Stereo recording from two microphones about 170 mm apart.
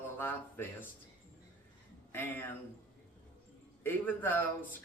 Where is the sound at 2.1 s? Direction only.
10° left (ahead or behind).